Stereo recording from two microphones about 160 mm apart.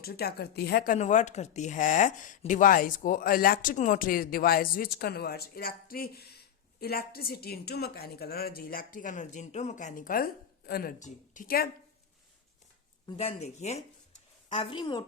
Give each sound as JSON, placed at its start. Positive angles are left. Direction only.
{"t": 0.0, "sound": "a woman's voice", "side_deg": 75}
{"t": 0.9, "sound": "speech", "side_deg": 45}
{"t": 13.1, "sound": "speech", "side_deg": 45}
{"t": 14.7, "sound": "speech", "side_deg": 30}